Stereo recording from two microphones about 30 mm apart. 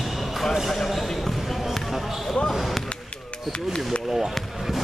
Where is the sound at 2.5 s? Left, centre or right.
Centre.